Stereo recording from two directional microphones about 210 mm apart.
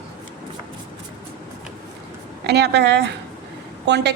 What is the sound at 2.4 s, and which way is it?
A woman's voice, 55° right (ahead or behind).